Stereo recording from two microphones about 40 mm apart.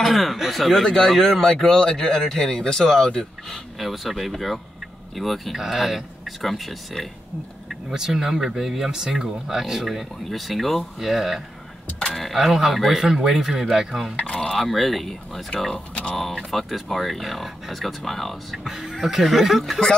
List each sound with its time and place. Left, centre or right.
0.0 s speech: centre
3.8 s speech: centre
7.9 s speech: centre
12.0 s speech: centre
12.4 s speech: centre
14.3 s speech: centre
15.9 s speech: left
16.2 s speech: centre
18.6 s speech: centre